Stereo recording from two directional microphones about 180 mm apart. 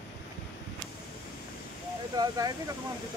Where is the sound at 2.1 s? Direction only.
20° right (ahead or behind).